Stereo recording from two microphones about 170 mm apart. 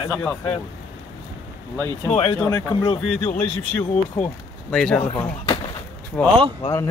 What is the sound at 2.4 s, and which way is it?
Speech, 15° left (ahead or behind).